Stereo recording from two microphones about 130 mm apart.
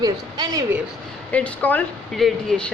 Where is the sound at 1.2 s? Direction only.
10° left (ahead or behind).